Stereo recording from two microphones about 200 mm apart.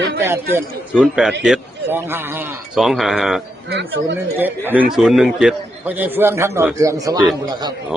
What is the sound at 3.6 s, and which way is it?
Speech, 60° right (ahead or behind).